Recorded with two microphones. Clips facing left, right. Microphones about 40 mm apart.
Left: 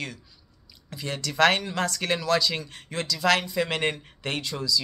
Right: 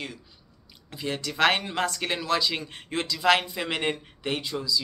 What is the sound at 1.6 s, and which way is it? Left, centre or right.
Speech, right.